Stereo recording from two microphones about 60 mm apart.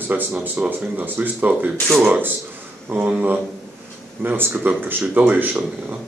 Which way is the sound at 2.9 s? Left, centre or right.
Right.